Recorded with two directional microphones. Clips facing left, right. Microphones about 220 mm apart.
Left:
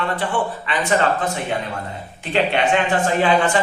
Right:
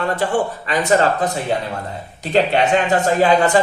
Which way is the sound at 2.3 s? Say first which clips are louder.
Right 3 dB; 40° right (ahead or behind).